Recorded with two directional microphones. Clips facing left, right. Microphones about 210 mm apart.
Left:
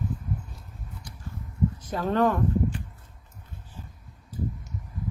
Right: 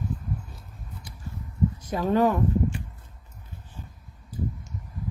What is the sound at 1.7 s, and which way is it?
Speech, 10° right (ahead or behind).